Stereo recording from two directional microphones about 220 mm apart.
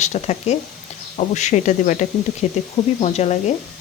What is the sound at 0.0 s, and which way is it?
Speech, 30° left (ahead or behind).